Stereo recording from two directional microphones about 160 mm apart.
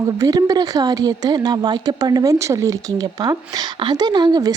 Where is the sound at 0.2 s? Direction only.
20° right (ahead or behind).